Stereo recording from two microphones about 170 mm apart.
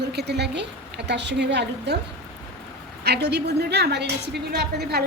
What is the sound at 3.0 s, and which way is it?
A woman's voice, 75° right (ahead or behind).